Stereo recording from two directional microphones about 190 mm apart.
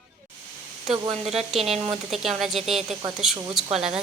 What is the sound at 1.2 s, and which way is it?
Speech, 35° right (ahead or behind).